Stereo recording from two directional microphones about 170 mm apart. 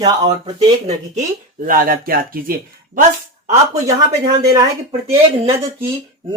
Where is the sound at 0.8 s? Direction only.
50° right (ahead or behind).